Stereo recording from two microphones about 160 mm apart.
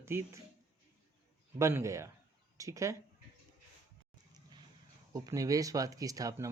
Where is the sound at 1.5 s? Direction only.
15° right (ahead or behind).